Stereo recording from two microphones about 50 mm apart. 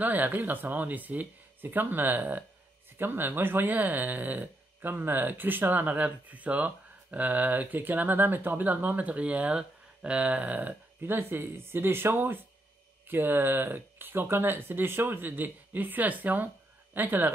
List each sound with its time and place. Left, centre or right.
0.0 s speech: right
11.0 s speech: right